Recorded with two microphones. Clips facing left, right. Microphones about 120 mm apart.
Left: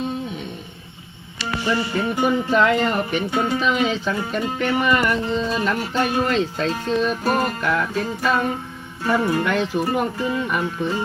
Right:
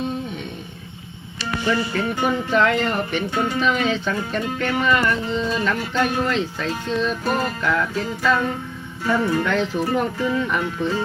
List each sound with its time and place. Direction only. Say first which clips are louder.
1.6 s music: even; 15° left (ahead or behind)
2.5 s speech: right 1 dB; 5° left (ahead or behind)
4.5 s music: left 1 dB; 15° left (ahead or behind)